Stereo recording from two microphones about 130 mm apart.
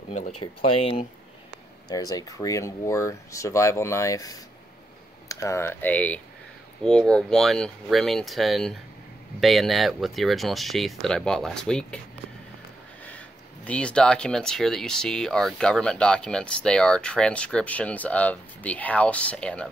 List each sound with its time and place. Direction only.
0.1 s speech: 90° left
0.7 s speech: 45° left (ahead or behind)
1.9 s speech: 30° left (ahead or behind); by 12.0 s 5° left (ahead or behind)
13.7 s speech: 10° left (ahead or behind)